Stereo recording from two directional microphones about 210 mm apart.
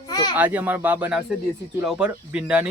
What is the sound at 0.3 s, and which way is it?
Speech, 10° right (ahead or behind).